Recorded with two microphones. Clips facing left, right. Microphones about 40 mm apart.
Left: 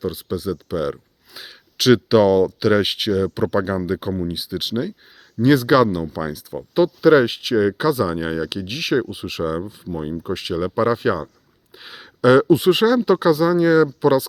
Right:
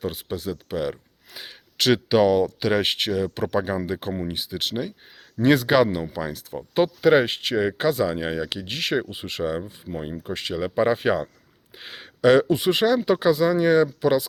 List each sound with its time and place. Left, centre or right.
0.0 s speech: centre
5.4 s speech: centre
6.7 s speech: centre
10.8 s speech: centre
11.8 s speech: centre